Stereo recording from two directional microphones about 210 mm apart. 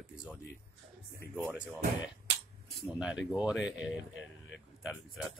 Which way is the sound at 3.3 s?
5° right (ahead or behind).